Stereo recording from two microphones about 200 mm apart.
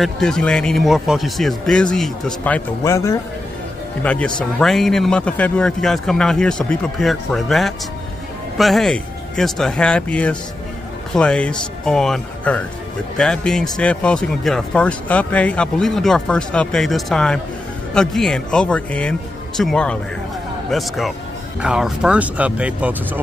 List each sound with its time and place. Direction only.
0.0 s speech: 5° left (ahead or behind)